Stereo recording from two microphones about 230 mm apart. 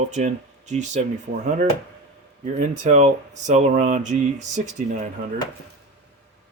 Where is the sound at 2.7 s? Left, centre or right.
Right.